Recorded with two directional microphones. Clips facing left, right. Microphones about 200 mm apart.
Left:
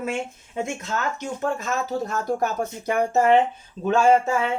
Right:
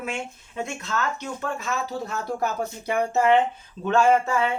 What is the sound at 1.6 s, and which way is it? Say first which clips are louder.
Speech: left 3 dB; 45° left (ahead or behind).